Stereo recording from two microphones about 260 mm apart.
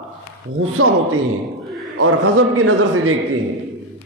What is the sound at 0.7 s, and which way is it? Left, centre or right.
A man's voice, right.